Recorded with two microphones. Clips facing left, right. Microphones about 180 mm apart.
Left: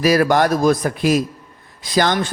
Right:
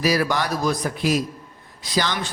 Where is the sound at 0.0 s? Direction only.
50° left (ahead or behind).